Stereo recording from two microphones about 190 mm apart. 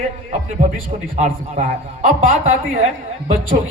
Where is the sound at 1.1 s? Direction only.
40° right (ahead or behind).